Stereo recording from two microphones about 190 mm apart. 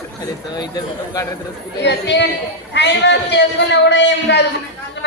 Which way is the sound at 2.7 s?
65° left (ahead or behind).